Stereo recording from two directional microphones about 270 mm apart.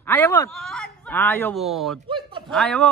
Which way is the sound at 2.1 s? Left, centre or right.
Centre.